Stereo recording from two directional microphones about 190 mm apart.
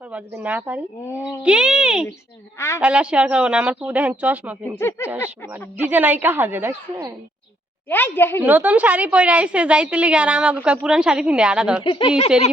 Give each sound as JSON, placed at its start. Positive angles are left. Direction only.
{"t": 0.1, "sound": "a woman's voice", "side_deg": -10}
{"t": 2.6, "sound": "speech", "side_deg": 15}
{"t": 2.8, "sound": "speech", "side_deg": -5}
{"t": 4.8, "sound": "speech", "side_deg": 15}
{"t": 5.9, "sound": "speech", "side_deg": -10}
{"t": 7.9, "sound": "speech", "side_deg": 10}
{"t": 8.4, "sound": "a woman's voice", "side_deg": -10}
{"t": 11.8, "sound": "speech", "side_deg": 25}